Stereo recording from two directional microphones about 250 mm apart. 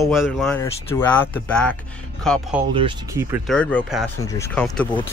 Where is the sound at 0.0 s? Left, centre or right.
Centre.